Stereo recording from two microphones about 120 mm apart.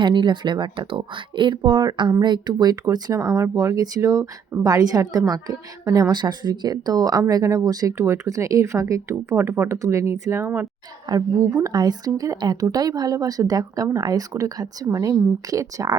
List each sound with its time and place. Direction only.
0.0 s speech: 40° right (ahead or behind); by 10.7 s 20° right (ahead or behind)
11.1 s speech: 30° right (ahead or behind)